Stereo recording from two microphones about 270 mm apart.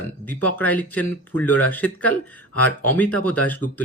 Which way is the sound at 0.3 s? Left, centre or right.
Centre.